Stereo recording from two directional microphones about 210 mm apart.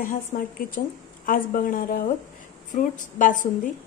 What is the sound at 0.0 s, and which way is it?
Speech, 40° left (ahead or behind).